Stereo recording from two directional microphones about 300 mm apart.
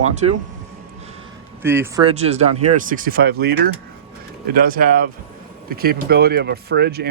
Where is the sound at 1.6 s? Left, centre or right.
Centre; by 3.5 s right.